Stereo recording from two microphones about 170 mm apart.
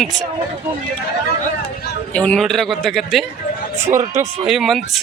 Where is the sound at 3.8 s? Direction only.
45° right (ahead or behind).